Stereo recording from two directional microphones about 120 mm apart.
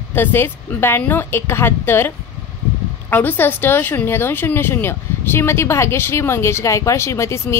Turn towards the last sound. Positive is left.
turn(degrees=20)  # may be behind; listen again after turning